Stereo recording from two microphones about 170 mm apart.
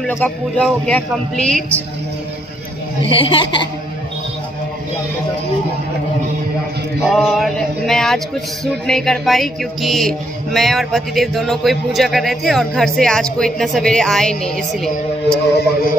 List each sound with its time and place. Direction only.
0.0 s music: 5° left (ahead or behind)
3.0 s speech: 30° left (ahead or behind)
7.1 s music: centre (ahead or behind)